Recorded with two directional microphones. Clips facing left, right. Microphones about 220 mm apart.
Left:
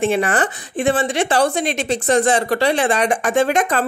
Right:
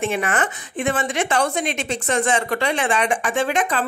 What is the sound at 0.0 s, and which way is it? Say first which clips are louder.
A woman's voice: left 5 dB; 30° left (ahead or behind).